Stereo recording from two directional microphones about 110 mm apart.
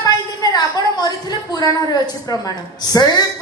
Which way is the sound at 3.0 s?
35° left (ahead or behind).